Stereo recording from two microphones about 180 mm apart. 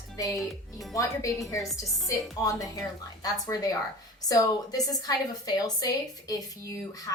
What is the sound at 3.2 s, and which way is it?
Speech, 20° left (ahead or behind).